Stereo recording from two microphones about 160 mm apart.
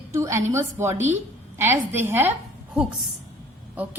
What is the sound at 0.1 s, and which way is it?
A woman's voice, 15° right (ahead or behind).